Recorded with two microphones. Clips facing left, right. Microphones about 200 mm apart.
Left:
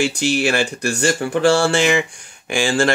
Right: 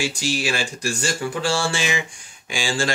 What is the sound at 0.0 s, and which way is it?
Speech, 60° left (ahead or behind).